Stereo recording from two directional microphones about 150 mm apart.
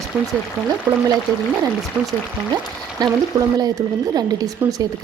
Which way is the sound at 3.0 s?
25° right (ahead or behind).